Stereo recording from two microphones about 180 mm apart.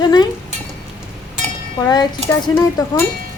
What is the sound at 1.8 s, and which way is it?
Speech, 25° left (ahead or behind).